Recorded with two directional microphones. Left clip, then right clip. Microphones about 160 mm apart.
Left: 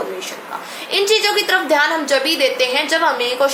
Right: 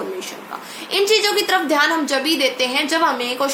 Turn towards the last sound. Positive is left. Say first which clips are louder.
# left 3 dB
turn(degrees=-20)  # may be behind; listen again after turning